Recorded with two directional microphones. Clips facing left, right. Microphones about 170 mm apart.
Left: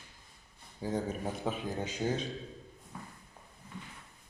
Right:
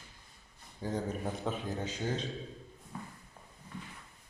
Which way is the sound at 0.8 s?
10° left (ahead or behind).